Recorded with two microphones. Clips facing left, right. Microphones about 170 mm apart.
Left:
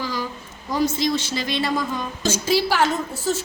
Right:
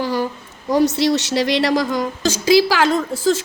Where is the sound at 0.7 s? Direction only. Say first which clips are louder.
Right 6 dB; 70° right (ahead or behind).